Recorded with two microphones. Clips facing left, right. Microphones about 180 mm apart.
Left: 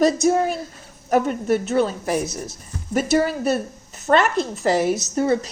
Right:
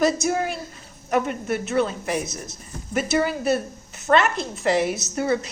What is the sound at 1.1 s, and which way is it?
A woman's voice, 40° left (ahead or behind).